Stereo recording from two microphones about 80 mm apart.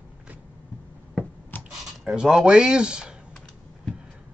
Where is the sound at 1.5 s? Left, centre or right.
Left.